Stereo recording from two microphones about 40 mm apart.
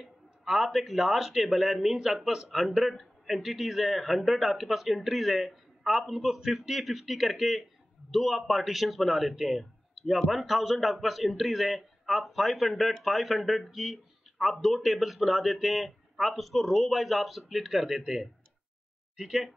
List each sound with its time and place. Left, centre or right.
0.0 s speech: centre